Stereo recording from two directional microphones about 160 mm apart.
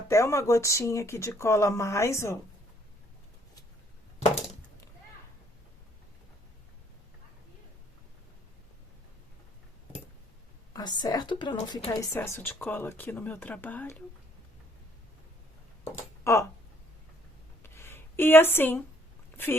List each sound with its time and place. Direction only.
0.1 s speech: 20° left (ahead or behind)
10.8 s speech: 25° left (ahead or behind)
11.9 s speech: 15° left (ahead or behind)
16.2 s speech: 20° left (ahead or behind)
17.6 s a sound: 15° left (ahead or behind)